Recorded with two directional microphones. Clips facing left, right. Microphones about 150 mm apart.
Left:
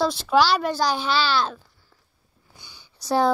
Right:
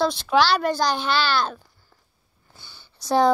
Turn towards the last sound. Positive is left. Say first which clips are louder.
# right 2 dB
turn(degrees=10)  # may be behind; listen again after turning